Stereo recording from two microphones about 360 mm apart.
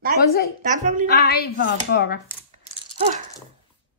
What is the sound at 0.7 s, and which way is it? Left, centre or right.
Speech, right.